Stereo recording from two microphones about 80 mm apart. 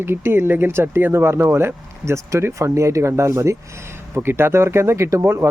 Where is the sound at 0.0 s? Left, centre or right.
Right.